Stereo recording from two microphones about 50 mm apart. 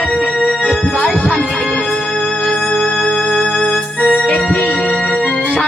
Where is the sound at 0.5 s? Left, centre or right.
Centre.